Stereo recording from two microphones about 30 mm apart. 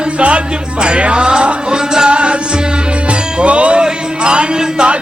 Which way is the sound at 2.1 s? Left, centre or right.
Right.